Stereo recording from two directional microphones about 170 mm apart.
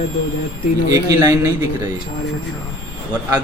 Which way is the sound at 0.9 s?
20° right (ahead or behind).